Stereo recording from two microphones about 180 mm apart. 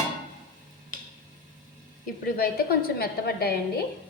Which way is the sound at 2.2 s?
55° left (ahead or behind).